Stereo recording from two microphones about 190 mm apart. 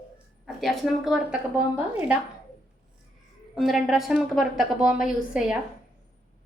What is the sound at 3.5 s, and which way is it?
A woman's voice, centre (ahead or behind).